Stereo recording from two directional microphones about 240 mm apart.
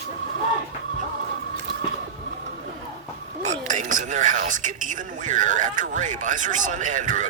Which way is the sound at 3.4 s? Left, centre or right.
Right.